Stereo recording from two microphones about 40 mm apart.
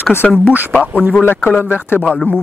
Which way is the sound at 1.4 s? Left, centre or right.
Left.